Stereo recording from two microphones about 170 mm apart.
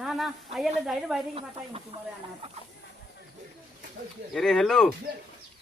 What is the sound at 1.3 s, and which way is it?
Speech, 35° right (ahead or behind).